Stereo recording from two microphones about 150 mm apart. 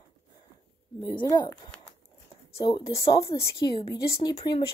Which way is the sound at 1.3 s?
25° left (ahead or behind).